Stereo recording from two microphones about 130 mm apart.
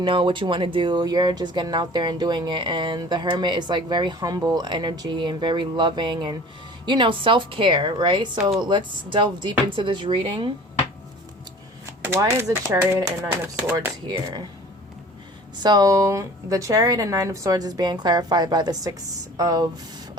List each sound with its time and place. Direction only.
0.0 s speech: 40° right (ahead or behind)
11.9 s a woman's voice: 20° right (ahead or behind)
15.6 s a woman's voice: 30° right (ahead or behind)